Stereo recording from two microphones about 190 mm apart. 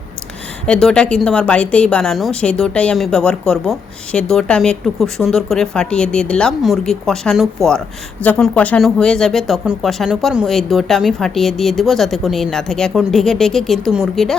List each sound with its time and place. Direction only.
0.7 s a woman's voice: 5° left (ahead or behind)